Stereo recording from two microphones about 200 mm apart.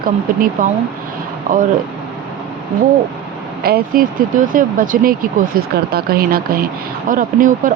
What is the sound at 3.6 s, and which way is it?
Speech, 50° right (ahead or behind).